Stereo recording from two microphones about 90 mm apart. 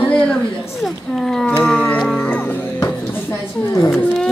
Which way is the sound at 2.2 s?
15° left (ahead or behind).